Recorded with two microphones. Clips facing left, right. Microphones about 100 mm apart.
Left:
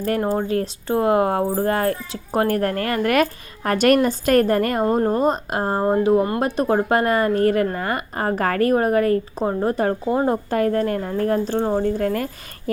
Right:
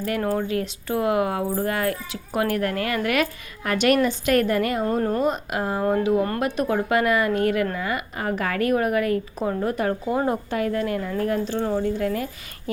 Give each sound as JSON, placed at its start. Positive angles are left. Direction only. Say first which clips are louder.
{"t": 0.2, "sound": "speech", "louder": "left 3 dB", "side_deg": 25}
{"t": 0.4, "sound": "speech", "louder": "left 4 dB", "side_deg": 35}
{"t": 4.9, "sound": "speech", "louder": "left 4 dB", "side_deg": 35}
{"t": 10.5, "sound": "a woman's voice", "louder": "left 4 dB", "side_deg": 45}